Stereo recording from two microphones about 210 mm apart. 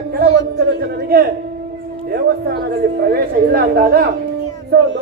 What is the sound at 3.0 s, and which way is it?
Speech, 45° right (ahead or behind).